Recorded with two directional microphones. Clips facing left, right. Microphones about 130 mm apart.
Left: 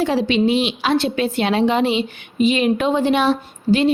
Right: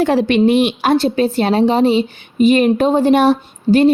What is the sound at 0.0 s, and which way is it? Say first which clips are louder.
A woman's voice: right 4 dB; 55° right (ahead or behind).